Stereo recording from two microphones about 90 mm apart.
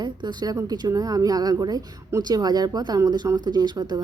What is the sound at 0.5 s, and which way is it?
Speech, 45° right (ahead or behind).